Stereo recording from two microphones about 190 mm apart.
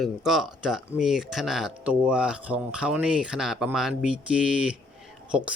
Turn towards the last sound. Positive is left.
turn(degrees=-5)  # may be behind; listen again after turning